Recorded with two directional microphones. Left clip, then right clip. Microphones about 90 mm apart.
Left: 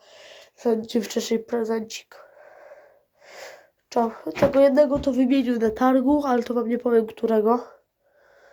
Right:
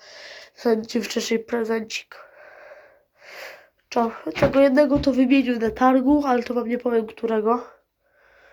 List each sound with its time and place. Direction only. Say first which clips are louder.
0.2 s a sound: right 2 dB; centre (ahead or behind)
0.8 s speech: even; 40° left (ahead or behind)
1.3 s speech: right 1 dB; 15° left (ahead or behind)
3.2 s a sound: right 3 dB; 25° left (ahead or behind)
4.9 s speech: right 3 dB; 5° right (ahead or behind)
5.3 s speech: right 1 dB; 35° left (ahead or behind)
6.9 s speech: left 4 dB; 80° left; by 7.8 s 55° left (ahead or behind)